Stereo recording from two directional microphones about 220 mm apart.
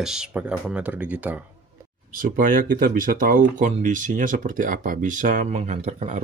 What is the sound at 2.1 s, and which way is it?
Speech, 40° right (ahead or behind).